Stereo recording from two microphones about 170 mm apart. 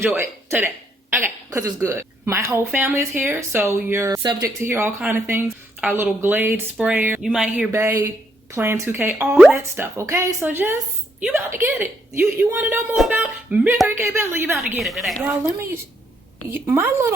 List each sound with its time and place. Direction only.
0.0 s speech: 15° right (ahead or behind)
14.8 s speech: centre (ahead or behind)
16.5 s speech: 10° right (ahead or behind)